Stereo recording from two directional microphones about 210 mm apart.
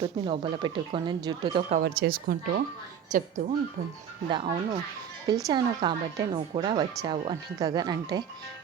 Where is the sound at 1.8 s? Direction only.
45° right (ahead or behind).